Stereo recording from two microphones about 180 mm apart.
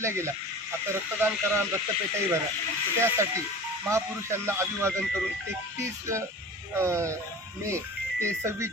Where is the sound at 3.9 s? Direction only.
15° right (ahead or behind).